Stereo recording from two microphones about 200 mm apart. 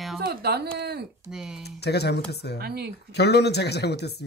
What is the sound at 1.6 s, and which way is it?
Speech, 55° left (ahead or behind).